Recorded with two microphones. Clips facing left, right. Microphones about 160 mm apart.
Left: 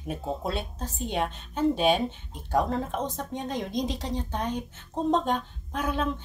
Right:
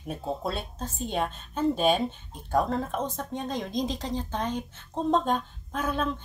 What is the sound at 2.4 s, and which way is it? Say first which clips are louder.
A woman's voice: even; 20° left (ahead or behind).